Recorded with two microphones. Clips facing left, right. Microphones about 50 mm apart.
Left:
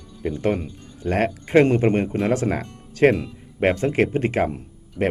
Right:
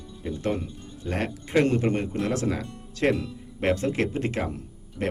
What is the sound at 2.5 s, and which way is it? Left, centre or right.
Speech, left.